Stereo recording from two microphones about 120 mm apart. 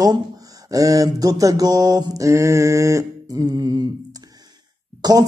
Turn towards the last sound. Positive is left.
turn(degrees=-30)  # may be behind; listen again after turning